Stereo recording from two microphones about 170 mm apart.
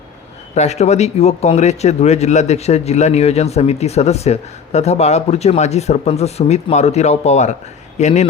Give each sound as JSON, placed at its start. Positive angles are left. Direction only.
{"t": 0.5, "sound": "speech", "side_deg": 40}